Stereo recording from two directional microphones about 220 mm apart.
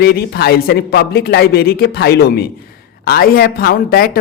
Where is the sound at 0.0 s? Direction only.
45° left (ahead or behind).